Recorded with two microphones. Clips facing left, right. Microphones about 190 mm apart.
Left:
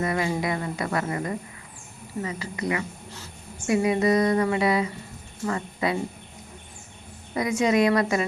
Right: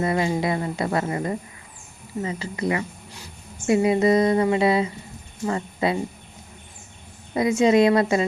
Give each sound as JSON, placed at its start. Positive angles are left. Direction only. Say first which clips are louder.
{"t": 0.0, "sound": "speech", "louder": "right 3 dB", "side_deg": -25}
{"t": 7.3, "sound": "speech", "louder": "right 4 dB", "side_deg": -25}